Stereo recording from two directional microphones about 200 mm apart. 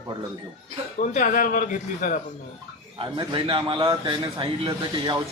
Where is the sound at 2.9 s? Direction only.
25° right (ahead or behind).